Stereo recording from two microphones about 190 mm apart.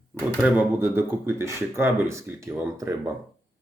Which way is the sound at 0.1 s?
10° right (ahead or behind).